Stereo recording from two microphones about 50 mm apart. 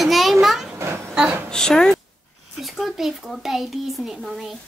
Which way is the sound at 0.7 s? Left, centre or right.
Right.